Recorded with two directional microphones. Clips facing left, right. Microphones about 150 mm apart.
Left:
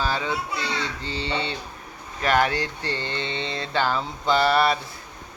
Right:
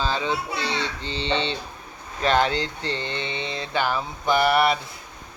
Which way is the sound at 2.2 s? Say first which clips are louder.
Right 1 dB; 25° right (ahead or behind).